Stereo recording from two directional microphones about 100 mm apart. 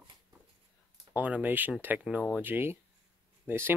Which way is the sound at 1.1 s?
15° right (ahead or behind).